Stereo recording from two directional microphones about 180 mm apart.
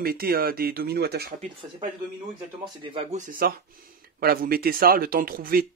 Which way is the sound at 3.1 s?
45° right (ahead or behind).